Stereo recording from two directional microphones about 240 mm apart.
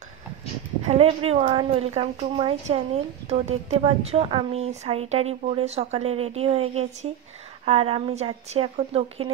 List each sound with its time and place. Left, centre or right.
0.8 s speech: right